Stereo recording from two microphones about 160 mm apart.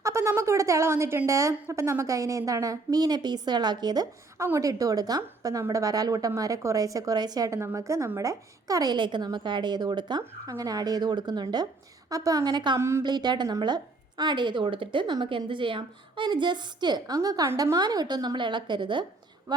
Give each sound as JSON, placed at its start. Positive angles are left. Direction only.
{"t": 0.0, "sound": "a woman's voice", "side_deg": -15}